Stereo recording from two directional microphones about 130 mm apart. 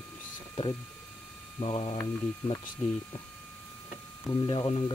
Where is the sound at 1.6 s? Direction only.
45° left (ahead or behind).